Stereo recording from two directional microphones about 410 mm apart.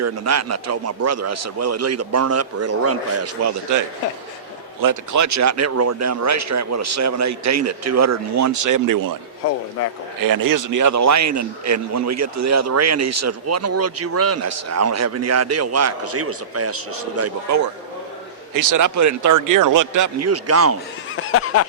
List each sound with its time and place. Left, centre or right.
0.0 s a man's voice: right
4.8 s a man's voice: right
10.2 s a man's voice: right
18.5 s speech: right
21.2 s a sound: left